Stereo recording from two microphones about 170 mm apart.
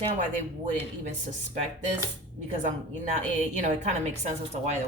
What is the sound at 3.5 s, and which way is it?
Speech, 45° right (ahead or behind).